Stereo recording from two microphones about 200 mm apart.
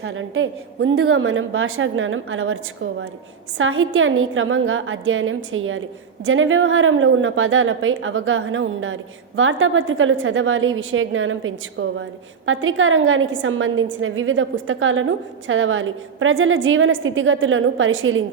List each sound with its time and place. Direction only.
0.0 s a woman's voice: 80° right
3.6 s a woman's voice: 80° right